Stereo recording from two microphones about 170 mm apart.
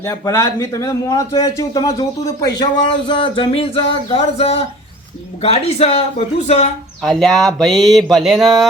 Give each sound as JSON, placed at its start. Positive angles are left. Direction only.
{"t": 0.0, "sound": "a man's voice", "side_deg": 15}
{"t": 7.0, "sound": "speech", "side_deg": 0}